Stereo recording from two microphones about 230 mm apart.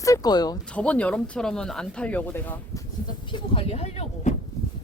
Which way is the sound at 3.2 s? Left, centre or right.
Left.